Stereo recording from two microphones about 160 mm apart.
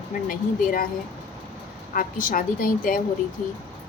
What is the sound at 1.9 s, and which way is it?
A woman's voice, 60° left (ahead or behind).